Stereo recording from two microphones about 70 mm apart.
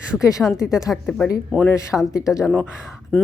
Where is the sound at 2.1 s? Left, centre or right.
Left.